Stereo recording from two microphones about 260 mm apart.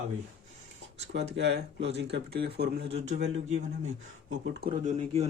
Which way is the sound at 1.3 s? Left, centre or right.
Right.